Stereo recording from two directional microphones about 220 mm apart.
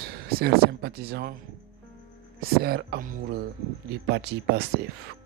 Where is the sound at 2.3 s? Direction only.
45° right (ahead or behind).